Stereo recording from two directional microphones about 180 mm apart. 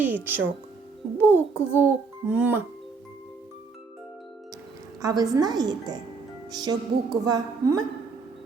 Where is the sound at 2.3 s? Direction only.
10° right (ahead or behind).